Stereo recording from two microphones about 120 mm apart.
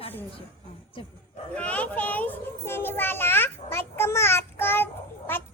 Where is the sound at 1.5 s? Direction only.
10° left (ahead or behind).